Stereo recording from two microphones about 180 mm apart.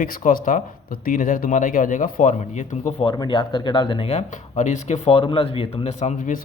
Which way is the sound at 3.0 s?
25° left (ahead or behind).